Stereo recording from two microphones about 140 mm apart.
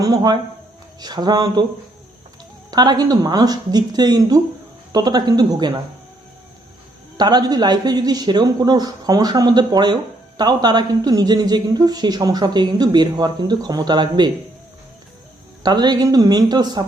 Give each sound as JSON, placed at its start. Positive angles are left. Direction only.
{"t": 0.0, "sound": "speech", "side_deg": -30}
{"t": 2.6, "sound": "speech", "side_deg": -30}
{"t": 7.2, "sound": "speech", "side_deg": -30}
{"t": 15.6, "sound": "speech", "side_deg": -30}